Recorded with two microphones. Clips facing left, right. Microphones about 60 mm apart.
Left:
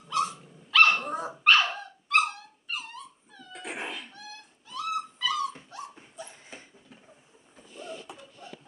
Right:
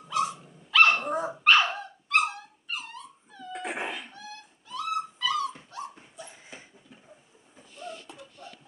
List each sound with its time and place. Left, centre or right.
0.7 s dog: centre
3.5 s cat: right
4.1 s dog: centre
7.5 s a sound: centre